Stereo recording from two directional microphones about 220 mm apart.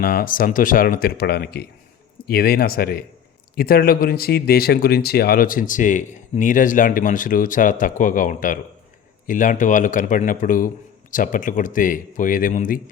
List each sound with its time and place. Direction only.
0.0 s speech: 40° left (ahead or behind)